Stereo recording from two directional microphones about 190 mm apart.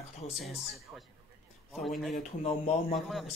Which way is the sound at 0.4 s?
Centre (ahead or behind).